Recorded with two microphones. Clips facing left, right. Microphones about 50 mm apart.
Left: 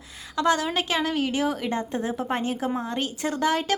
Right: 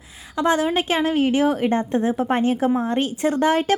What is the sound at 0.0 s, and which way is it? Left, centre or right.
Speech, centre.